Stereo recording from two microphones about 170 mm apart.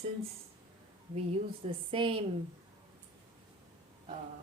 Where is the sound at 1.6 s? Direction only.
35° right (ahead or behind).